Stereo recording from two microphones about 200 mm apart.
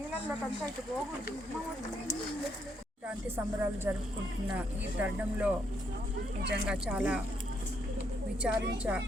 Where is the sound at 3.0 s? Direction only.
10° right (ahead or behind).